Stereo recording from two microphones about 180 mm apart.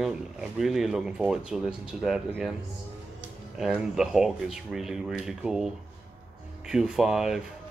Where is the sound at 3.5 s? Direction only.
Centre (ahead or behind).